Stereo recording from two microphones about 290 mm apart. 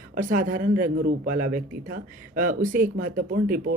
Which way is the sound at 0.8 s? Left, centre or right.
Right.